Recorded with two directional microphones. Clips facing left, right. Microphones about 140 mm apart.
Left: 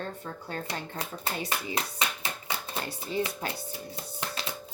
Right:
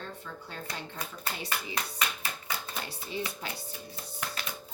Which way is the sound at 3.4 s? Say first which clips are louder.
Left 5 dB; 50° left (ahead or behind).